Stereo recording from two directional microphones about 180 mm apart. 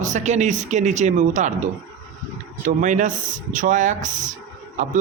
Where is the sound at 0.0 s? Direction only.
40° right (ahead or behind).